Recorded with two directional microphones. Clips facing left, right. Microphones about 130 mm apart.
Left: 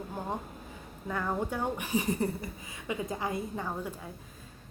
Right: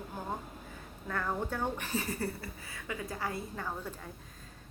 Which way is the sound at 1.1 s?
15° left (ahead or behind).